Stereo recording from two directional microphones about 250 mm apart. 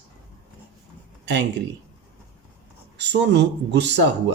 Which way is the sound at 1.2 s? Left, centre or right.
Right.